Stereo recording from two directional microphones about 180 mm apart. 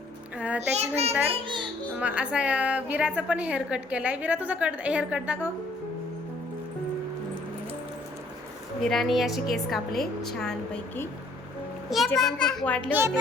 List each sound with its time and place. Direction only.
0.3 s child singing: 5° right (ahead or behind)
0.7 s a child's voice: 35° right (ahead or behind)
2.0 s a woman's voice: 5° right (ahead or behind)
8.8 s a woman's voice: centre (ahead or behind)
12.9 s a woman's voice: 15° right (ahead or behind)